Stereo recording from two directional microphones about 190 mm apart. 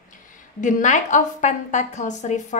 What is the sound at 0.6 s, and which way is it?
A woman's voice, 40° left (ahead or behind).